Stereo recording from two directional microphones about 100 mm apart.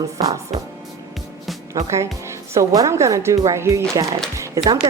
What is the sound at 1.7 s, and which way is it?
Speech, 30° right (ahead or behind).